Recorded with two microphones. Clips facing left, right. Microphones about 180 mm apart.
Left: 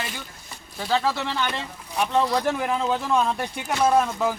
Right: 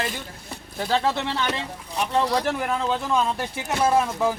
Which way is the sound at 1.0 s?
20° right (ahead or behind).